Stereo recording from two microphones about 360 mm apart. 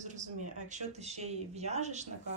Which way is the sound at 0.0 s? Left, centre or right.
Centre.